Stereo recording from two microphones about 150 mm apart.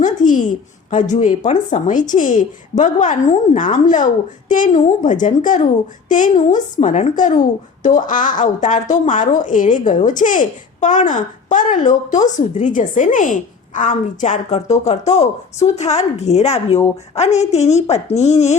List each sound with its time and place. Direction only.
0.0 s a woman's voice: 60° left (ahead or behind)